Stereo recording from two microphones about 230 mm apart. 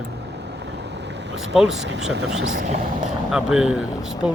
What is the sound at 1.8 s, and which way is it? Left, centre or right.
Speech, right.